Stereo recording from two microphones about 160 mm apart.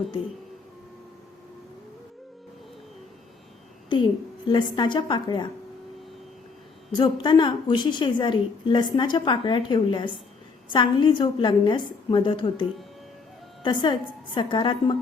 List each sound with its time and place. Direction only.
4.4 s a woman's voice: 30° left (ahead or behind)
6.9 s a woman's voice: 30° left (ahead or behind)